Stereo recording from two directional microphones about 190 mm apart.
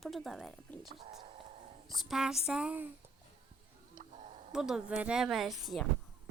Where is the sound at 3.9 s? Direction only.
35° right (ahead or behind).